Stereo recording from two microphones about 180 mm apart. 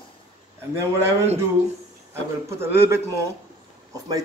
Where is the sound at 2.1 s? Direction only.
15° right (ahead or behind).